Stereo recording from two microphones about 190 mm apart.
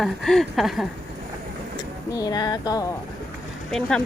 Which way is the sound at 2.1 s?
20° left (ahead or behind).